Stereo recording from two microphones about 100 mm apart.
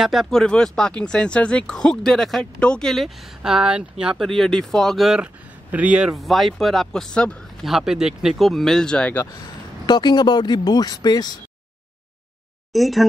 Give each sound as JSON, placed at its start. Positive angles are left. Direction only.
{"t": 0.0, "sound": "speech", "side_deg": 0}
{"t": 3.4, "sound": "speech", "side_deg": -10}
{"t": 4.3, "sound": "speech", "side_deg": 5}
{"t": 7.6, "sound": "speech", "side_deg": -5}
{"t": 9.2, "sound": "speech", "side_deg": 40}
{"t": 12.7, "sound": "speech", "side_deg": 0}